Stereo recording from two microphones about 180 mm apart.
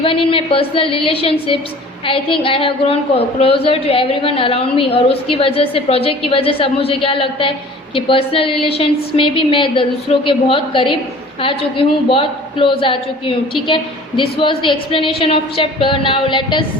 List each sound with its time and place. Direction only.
0.0 s a woman's voice: 30° left (ahead or behind)